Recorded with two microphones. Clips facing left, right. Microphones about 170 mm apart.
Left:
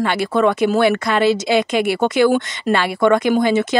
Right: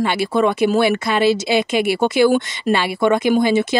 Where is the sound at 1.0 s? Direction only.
25° right (ahead or behind).